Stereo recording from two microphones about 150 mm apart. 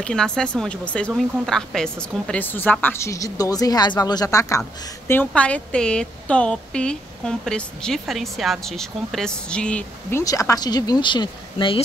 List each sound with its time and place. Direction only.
0.0 s a woman's voice: 5° left (ahead or behind)
10.2 s speech: 20° left (ahead or behind)